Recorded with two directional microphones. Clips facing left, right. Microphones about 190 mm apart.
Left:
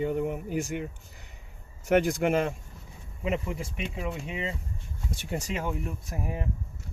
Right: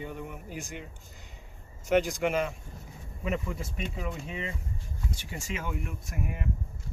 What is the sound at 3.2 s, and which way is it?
Speech, 20° left (ahead or behind).